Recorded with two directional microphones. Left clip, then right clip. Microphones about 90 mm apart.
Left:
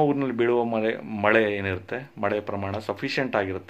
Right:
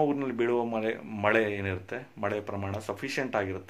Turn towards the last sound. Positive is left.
turn(degrees=20)  # may be behind; listen again after turning